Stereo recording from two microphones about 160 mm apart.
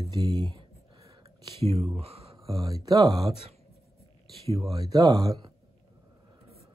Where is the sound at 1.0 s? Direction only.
20° right (ahead or behind).